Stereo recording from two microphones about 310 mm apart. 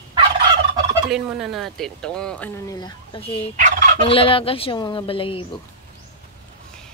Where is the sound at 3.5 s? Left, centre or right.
Right.